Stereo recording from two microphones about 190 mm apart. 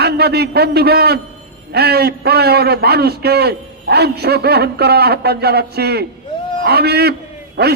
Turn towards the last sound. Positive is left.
turn(degrees=-60)  # may be behind; listen again after turning